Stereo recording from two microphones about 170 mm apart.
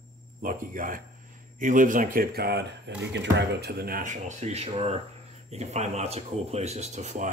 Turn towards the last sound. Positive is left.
turn(degrees=-45)  # may be behind; listen again after turning